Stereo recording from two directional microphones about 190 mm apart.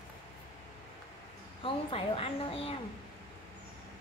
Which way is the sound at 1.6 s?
30° left (ahead or behind).